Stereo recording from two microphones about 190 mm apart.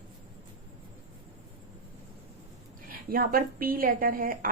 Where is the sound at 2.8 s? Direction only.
50° right (ahead or behind).